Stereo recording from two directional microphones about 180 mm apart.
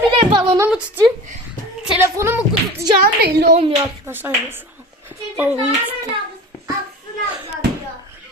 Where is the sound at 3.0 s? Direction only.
65° right (ahead or behind).